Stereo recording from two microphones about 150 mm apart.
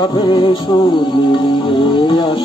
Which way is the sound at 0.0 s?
30° left (ahead or behind).